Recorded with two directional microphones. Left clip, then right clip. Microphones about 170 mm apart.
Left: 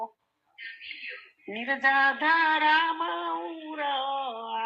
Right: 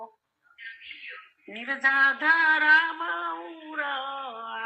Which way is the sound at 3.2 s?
30° left (ahead or behind).